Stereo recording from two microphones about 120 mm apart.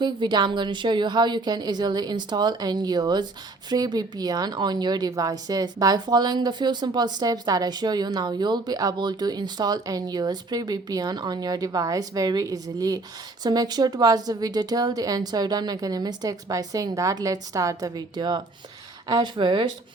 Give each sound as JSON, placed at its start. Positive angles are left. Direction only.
{"t": 0.0, "sound": "speech", "side_deg": -40}